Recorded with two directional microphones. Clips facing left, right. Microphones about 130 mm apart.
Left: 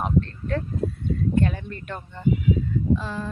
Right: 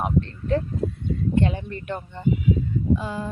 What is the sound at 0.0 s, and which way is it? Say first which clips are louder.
Speech: even; 20° right (ahead or behind).